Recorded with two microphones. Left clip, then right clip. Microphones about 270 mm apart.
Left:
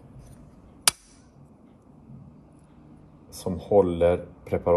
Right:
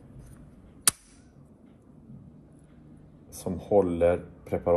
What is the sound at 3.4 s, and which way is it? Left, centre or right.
Speech, left.